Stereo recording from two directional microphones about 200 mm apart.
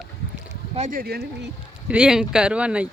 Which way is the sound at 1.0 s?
55° right (ahead or behind).